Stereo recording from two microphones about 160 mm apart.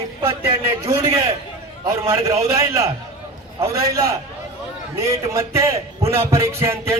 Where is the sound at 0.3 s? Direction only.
25° right (ahead or behind).